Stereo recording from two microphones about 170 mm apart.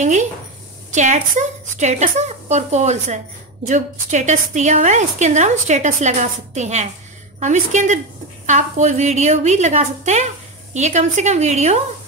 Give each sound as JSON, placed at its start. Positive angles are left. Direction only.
{"t": 0.0, "sound": "a woman's voice", "side_deg": -45}